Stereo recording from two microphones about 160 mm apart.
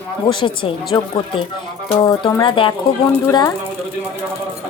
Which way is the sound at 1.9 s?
30° left (ahead or behind).